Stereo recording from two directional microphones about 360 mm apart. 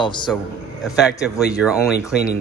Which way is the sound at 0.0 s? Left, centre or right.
Centre.